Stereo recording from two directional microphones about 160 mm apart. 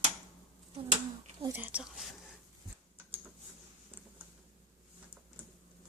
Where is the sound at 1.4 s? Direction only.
10° right (ahead or behind).